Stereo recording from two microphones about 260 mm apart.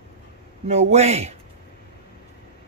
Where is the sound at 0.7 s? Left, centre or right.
Right.